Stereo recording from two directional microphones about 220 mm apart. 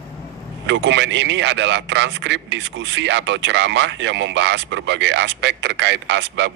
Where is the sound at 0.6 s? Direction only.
55° right (ahead or behind).